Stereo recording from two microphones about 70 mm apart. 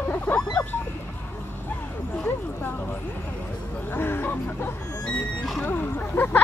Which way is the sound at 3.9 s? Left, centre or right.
Left.